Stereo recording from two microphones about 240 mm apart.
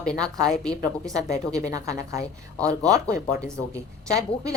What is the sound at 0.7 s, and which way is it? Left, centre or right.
A woman's voice, centre.